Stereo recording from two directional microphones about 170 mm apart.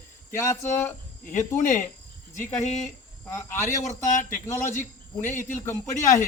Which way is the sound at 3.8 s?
45° left (ahead or behind).